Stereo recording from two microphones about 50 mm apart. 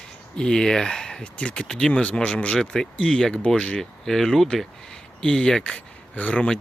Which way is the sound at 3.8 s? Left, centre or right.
Centre.